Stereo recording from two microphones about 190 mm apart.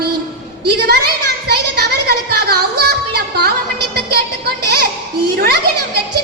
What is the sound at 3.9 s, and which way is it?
Music, 55° right (ahead or behind).